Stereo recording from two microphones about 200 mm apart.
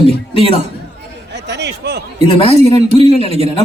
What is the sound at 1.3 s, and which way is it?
Speech, 60° right (ahead or behind).